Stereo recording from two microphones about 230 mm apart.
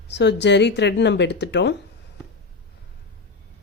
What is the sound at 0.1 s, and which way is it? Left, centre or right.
A woman's voice, left.